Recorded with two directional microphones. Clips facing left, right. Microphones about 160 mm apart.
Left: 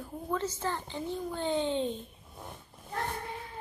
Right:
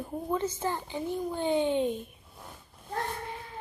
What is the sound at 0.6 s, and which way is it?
A child's voice, 15° right (ahead or behind).